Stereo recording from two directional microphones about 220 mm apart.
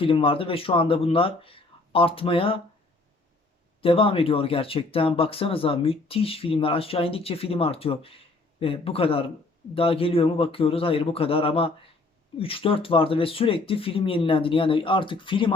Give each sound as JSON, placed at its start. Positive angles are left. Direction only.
{"t": 0.0, "sound": "speech", "side_deg": 25}
{"t": 3.8, "sound": "speech", "side_deg": 25}